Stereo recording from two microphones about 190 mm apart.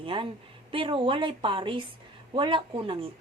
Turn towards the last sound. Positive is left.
turn(degrees=-25)  # may be behind; listen again after turning